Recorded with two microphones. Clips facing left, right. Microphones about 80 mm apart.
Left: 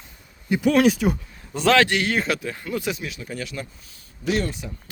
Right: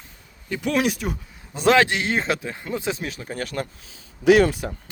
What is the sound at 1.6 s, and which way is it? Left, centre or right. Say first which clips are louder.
Speech: even; right.